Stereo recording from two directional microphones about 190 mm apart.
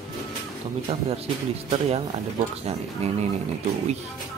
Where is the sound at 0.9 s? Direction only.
30° right (ahead or behind).